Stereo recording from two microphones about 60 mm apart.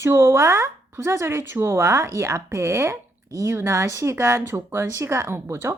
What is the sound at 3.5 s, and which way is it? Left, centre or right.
A woman's voice, right.